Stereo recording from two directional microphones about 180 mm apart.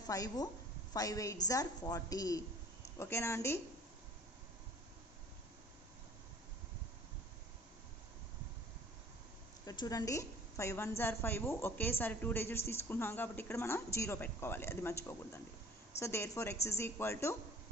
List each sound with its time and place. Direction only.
0.1 s a woman's voice: 20° left (ahead or behind)
9.6 s a woman's voice: 20° left (ahead or behind)